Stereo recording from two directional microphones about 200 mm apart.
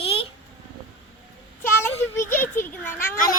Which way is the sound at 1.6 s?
10° left (ahead or behind).